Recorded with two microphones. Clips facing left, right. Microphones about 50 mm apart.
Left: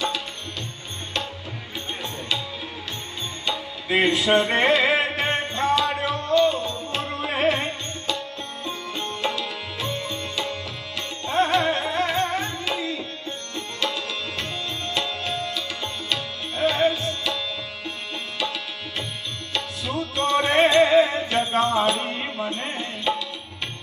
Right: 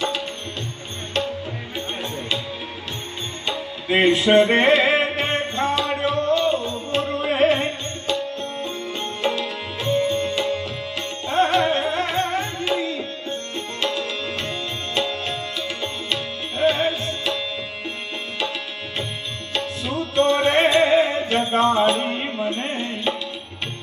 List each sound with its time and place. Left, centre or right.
3.9 s music: right
9.2 s tabla: right
10.2 s music: right
14.0 s music: right
19.5 s music: right